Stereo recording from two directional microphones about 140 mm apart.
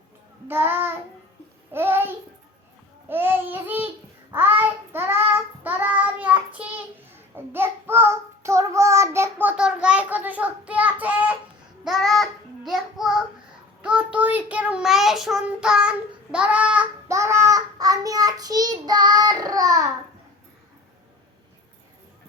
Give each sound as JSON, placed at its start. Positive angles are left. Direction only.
{"t": 0.4, "sound": "child singing", "side_deg": -15}
{"t": 1.7, "sound": "a child's voice", "side_deg": -15}
{"t": 3.1, "sound": "child singing", "side_deg": -15}
{"t": 11.9, "sound": "child singing", "side_deg": 0}
{"t": 17.1, "sound": "child singing", "side_deg": -20}